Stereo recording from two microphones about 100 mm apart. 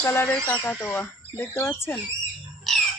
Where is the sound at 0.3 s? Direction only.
15° left (ahead or behind).